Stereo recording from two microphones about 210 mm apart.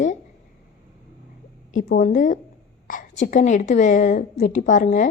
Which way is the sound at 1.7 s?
40° left (ahead or behind).